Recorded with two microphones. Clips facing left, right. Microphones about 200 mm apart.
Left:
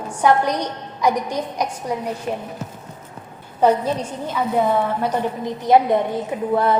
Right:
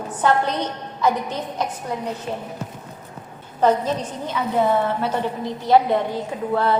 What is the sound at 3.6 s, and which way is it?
Speech, 10° left (ahead or behind).